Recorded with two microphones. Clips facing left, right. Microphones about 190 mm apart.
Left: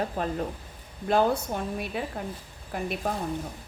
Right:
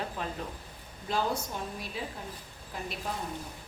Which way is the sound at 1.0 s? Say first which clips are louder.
Left 8 dB; 60° left (ahead or behind).